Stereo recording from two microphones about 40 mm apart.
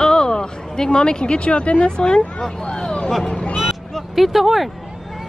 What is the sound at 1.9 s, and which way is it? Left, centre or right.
Speech, centre.